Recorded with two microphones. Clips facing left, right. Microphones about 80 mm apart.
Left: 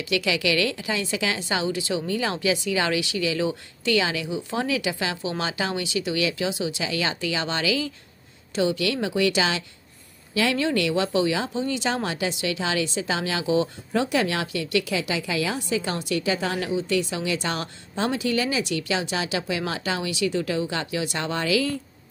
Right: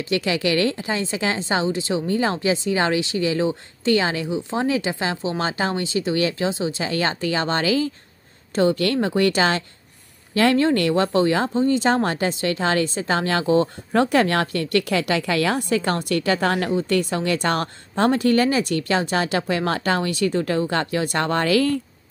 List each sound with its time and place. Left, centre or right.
0.0 s a woman's voice: right